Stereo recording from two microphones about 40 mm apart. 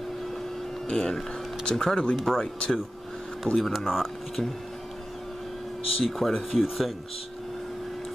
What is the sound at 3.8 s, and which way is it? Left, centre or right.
Speech, centre.